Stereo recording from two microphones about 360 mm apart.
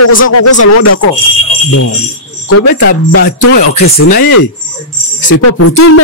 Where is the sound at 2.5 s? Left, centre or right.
Left.